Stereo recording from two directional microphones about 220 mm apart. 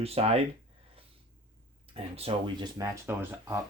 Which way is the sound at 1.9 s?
25° right (ahead or behind).